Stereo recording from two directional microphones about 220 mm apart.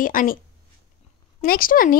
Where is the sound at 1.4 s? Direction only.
40° left (ahead or behind).